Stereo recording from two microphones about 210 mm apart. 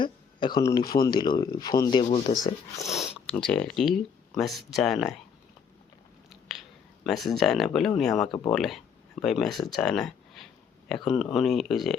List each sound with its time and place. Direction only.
0.0 s speech: 20° left (ahead or behind)
2.0 s speech: 30° left (ahead or behind)
2.9 s speech: centre (ahead or behind)
6.5 s speech: centre (ahead or behind)